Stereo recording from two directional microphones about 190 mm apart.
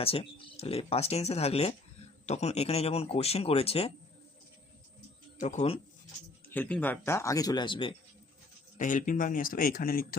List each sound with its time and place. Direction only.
0.0 s speech: 30° left (ahead or behind)
5.4 s speech: 40° left (ahead or behind)
6.5 s speech: 10° left (ahead or behind); by 7.9 s 25° left (ahead or behind)
8.8 s speech: 40° left (ahead or behind)